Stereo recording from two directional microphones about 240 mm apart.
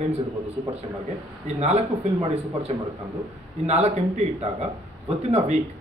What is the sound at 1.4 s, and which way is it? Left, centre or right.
A man's voice, right.